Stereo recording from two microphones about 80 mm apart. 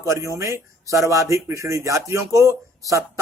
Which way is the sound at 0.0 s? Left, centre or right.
Right.